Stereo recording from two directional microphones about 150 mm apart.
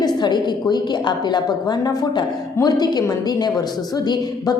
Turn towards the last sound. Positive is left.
turn(degrees=25)  # may be behind; listen again after turning